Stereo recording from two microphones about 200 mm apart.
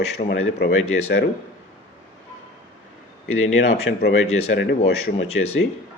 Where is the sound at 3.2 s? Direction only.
90° left.